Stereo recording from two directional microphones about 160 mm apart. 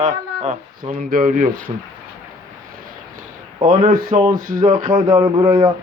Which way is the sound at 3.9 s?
60° right (ahead or behind).